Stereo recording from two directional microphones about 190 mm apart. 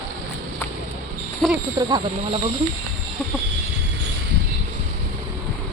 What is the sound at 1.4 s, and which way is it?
Speech, 5° left (ahead or behind).